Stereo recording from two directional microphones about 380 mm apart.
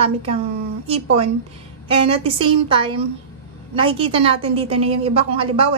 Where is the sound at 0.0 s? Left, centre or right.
Centre.